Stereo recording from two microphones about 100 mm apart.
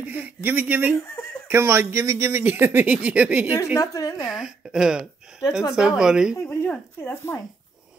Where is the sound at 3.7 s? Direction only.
35° left (ahead or behind).